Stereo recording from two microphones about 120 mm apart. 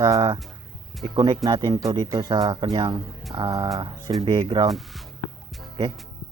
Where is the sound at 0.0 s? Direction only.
30° right (ahead or behind).